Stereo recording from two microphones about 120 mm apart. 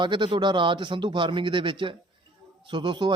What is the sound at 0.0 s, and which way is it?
A man's voice, 40° right (ahead or behind).